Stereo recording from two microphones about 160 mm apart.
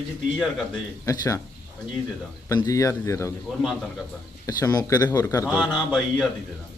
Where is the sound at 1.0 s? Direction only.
20° left (ahead or behind).